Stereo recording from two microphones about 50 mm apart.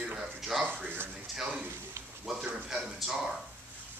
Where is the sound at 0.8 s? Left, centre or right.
Right.